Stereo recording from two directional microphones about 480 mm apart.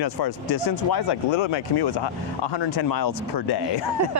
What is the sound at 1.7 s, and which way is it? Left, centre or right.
Speech, left.